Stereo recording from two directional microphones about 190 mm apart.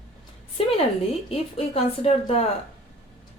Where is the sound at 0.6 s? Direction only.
30° left (ahead or behind).